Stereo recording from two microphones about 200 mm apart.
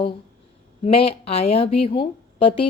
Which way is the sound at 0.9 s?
30° left (ahead or behind).